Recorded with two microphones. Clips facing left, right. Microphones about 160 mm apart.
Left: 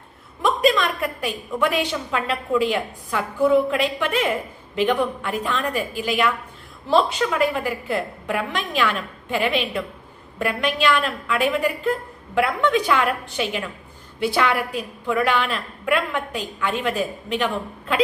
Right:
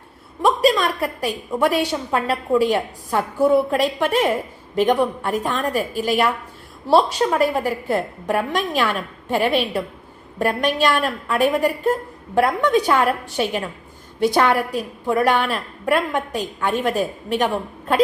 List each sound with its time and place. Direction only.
0.4 s a woman's voice: 35° right (ahead or behind)